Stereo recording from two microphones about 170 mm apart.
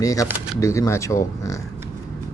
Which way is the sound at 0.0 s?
20° left (ahead or behind).